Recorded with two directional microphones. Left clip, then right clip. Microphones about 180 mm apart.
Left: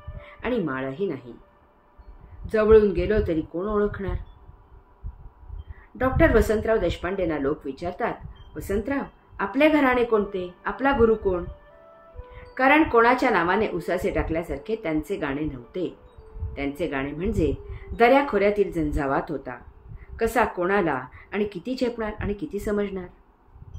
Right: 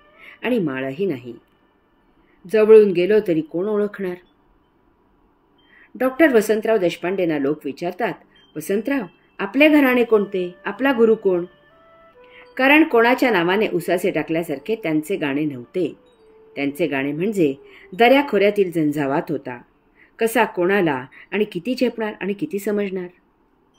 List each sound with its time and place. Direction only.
0.2 s a woman's voice: 55° right (ahead or behind)
2.5 s speech: 55° right (ahead or behind)
5.9 s speech: 55° right (ahead or behind)
12.5 s speech: 55° right (ahead or behind)